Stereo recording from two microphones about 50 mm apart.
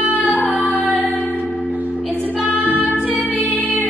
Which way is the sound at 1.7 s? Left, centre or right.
Right.